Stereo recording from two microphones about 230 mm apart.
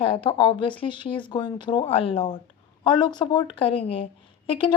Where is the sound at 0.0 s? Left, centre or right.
Left.